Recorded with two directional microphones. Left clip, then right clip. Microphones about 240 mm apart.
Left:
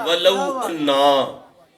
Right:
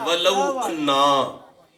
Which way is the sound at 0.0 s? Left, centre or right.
Centre.